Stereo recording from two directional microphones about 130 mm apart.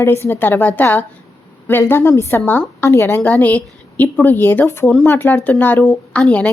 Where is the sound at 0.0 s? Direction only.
20° left (ahead or behind).